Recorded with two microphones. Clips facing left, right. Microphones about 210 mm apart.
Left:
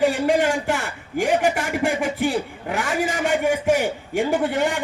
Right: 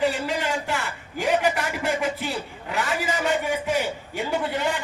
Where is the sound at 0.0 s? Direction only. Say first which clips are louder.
Left 6 dB; 50° left (ahead or behind).